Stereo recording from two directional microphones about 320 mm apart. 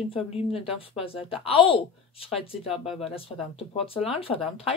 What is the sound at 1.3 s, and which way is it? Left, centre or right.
Speech, centre.